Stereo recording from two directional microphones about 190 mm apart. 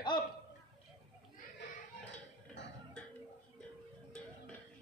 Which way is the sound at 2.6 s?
70° left (ahead or behind).